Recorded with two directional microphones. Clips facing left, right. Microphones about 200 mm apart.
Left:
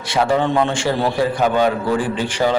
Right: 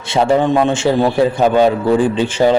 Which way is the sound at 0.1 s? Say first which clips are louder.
Right 4 dB; 25° right (ahead or behind).